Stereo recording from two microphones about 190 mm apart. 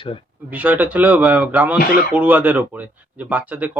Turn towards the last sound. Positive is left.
turn(degrees=-10)  # may be behind; listen again after turning